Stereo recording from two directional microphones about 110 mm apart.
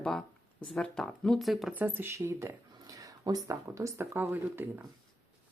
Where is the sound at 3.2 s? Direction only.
35° right (ahead or behind); by 4.7 s 20° right (ahead or behind).